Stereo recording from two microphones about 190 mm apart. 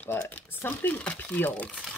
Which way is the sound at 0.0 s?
10° left (ahead or behind).